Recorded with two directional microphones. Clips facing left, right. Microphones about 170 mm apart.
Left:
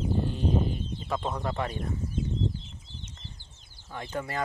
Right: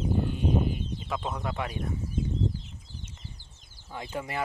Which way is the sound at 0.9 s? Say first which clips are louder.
Left 2 dB; 5° right (ahead or behind).